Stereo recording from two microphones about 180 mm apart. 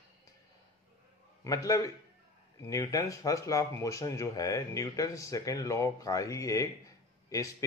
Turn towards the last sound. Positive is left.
turn(degrees=20)  # may be behind; listen again after turning